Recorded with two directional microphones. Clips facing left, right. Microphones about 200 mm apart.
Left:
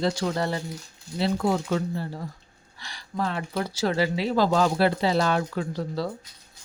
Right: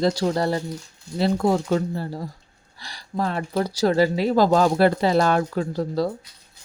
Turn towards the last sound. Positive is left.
turn(degrees=-45)  # may be behind; listen again after turning